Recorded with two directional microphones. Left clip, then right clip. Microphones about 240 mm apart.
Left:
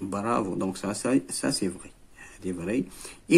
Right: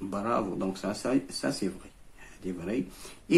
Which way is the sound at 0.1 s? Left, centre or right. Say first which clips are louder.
Left 2 dB; left.